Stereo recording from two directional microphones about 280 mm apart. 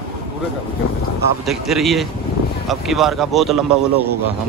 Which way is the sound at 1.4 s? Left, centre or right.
Centre.